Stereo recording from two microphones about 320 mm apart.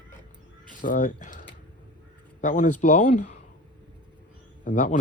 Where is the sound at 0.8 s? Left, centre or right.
Left.